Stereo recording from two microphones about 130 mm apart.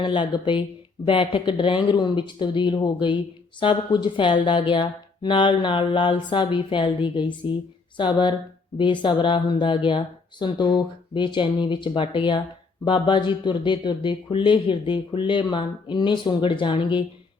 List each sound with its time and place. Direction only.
0.0 s speech: 40° left (ahead or behind)